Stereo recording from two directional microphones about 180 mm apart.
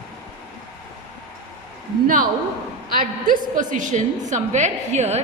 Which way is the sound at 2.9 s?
50° right (ahead or behind).